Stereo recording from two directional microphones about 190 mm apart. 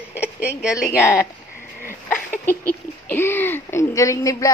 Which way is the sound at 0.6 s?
5° right (ahead or behind).